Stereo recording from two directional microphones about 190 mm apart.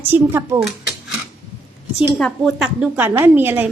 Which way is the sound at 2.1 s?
Centre (ahead or behind).